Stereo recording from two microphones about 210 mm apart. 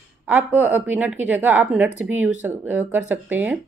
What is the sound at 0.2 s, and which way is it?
Speech, 10° right (ahead or behind).